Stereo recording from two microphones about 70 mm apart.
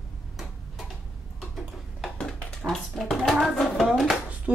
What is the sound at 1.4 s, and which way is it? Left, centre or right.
Tick-tock, centre.